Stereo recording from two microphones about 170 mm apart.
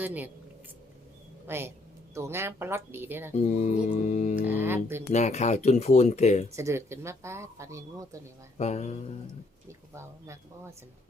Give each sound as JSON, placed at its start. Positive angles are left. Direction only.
{"t": 0.0, "sound": "a woman's voice", "side_deg": -10}
{"t": 1.5, "sound": "a woman's voice", "side_deg": -15}
{"t": 3.3, "sound": "music", "side_deg": 40}
{"t": 4.4, "sound": "mantra", "side_deg": -10}
{"t": 5.1, "sound": "speech", "side_deg": 40}
{"t": 6.6, "sound": "a woman's voice", "side_deg": -15}
{"t": 8.5, "sound": "speech", "side_deg": 40}
{"t": 9.6, "sound": "a woman's voice", "side_deg": -15}